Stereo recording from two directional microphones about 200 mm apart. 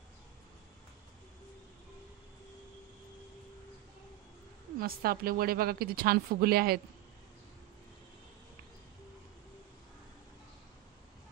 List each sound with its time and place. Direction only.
4.7 s speech: 50° right (ahead or behind)